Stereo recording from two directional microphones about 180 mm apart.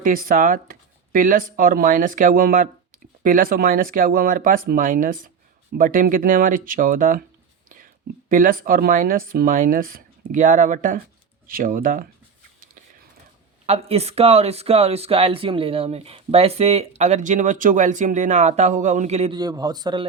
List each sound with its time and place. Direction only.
0.0 s speech: 50° right (ahead or behind)
8.3 s speech: 50° right (ahead or behind)
13.7 s speech: 35° right (ahead or behind)
19.3 s speech: 20° right (ahead or behind)